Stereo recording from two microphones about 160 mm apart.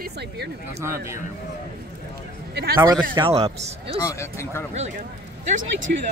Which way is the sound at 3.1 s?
30° right (ahead or behind).